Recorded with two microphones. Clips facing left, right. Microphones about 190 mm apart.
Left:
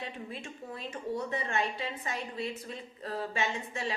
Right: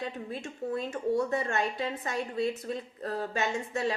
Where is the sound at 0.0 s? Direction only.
45° right (ahead or behind).